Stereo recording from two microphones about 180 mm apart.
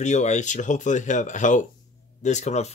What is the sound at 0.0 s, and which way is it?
Speech, 40° left (ahead or behind).